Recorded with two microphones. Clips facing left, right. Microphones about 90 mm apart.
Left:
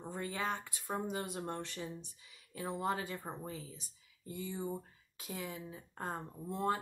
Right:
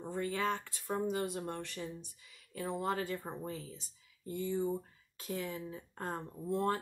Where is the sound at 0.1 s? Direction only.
25° left (ahead or behind).